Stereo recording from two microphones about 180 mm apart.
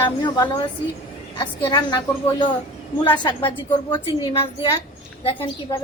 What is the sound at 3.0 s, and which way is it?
Speech, 25° left (ahead or behind).